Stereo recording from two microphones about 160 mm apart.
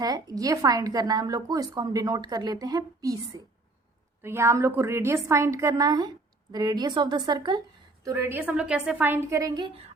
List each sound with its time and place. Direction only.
0.0 s a woman's voice: 25° right (ahead or behind)
9.6 s speech: 35° right (ahead or behind)